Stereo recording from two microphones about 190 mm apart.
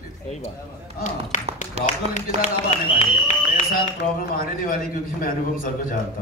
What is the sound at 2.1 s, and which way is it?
A man's voice, 40° left (ahead or behind).